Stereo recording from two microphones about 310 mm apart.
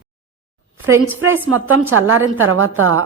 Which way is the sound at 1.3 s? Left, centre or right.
Right.